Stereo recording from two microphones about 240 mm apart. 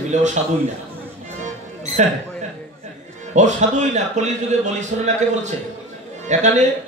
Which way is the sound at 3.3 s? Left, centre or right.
Right.